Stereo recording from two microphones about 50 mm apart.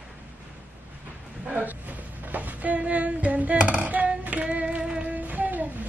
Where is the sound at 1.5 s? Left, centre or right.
Right.